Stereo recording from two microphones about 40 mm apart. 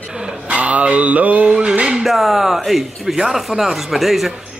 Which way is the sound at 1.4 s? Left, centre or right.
Right.